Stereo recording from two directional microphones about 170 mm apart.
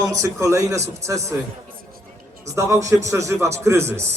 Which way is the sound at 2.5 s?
15° right (ahead or behind).